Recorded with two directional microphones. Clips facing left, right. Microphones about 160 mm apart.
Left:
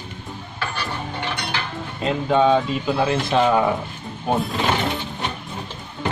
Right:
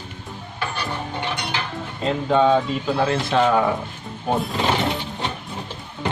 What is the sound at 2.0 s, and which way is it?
Speech, 5° left (ahead or behind).